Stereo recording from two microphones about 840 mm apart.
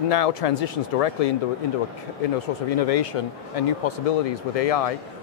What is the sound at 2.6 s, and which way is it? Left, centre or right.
Speech, left.